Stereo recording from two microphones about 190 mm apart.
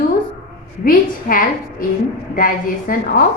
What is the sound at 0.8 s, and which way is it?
A woman's voice, 50° left (ahead or behind).